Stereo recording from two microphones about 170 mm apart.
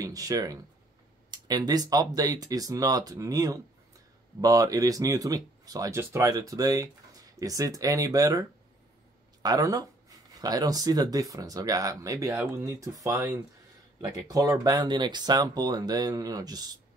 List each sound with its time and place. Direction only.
0.0 s speech: 20° right (ahead or behind)